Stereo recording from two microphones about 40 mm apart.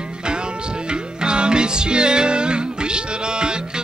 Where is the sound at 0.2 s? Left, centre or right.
Right.